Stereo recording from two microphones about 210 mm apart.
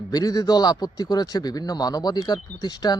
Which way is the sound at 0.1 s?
20° left (ahead or behind).